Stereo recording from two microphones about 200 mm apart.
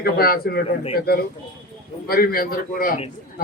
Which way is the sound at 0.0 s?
50° left (ahead or behind).